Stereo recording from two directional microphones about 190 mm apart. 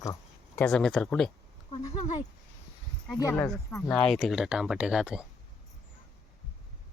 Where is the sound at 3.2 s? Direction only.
15° left (ahead or behind).